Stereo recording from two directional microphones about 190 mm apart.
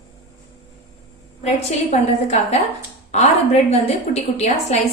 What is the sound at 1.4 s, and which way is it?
A woman's voice, 35° left (ahead or behind).